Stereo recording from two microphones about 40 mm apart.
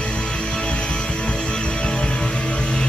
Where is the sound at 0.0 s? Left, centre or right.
Left.